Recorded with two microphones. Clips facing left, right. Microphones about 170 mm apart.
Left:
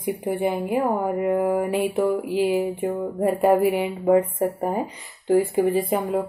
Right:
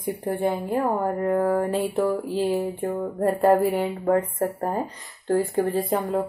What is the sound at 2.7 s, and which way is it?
Music, centre (ahead or behind).